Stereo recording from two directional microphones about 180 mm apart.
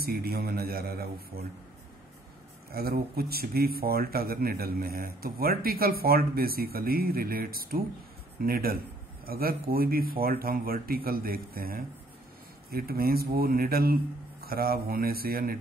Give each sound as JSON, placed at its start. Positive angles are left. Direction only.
{"t": 0.0, "sound": "speech", "side_deg": -55}
{"t": 2.7, "sound": "speech", "side_deg": -55}